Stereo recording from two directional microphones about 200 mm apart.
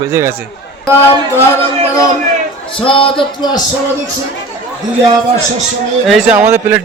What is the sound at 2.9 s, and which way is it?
Speech, 25° left (ahead or behind).